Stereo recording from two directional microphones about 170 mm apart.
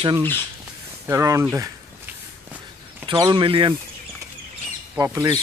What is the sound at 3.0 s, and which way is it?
Speech, 30° right (ahead or behind).